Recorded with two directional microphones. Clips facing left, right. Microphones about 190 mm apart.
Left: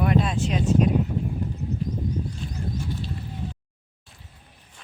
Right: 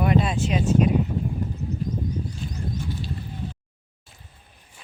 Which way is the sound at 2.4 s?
Centre (ahead or behind).